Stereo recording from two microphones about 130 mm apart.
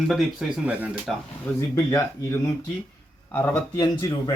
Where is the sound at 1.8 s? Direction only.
25° left (ahead or behind).